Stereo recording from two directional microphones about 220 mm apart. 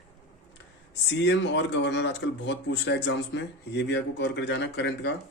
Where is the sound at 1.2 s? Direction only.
55° left (ahead or behind).